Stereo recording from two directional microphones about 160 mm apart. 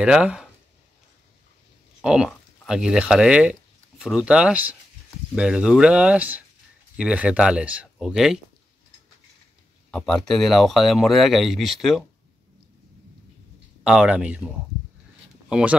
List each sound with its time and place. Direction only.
0.0 s speech: 5° right (ahead or behind)
2.0 s speech: centre (ahead or behind)
9.8 s speech: 5° left (ahead or behind)
13.8 s speech: 5° right (ahead or behind)
15.4 s a sound: 5° right (ahead or behind)